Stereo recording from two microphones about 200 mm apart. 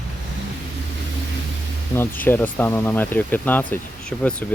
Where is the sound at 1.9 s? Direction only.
10° left (ahead or behind).